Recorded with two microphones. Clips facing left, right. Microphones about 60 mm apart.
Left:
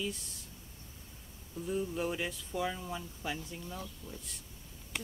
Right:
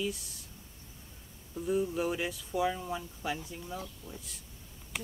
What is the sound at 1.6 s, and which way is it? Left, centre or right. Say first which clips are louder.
Speech: right 4 dB; centre.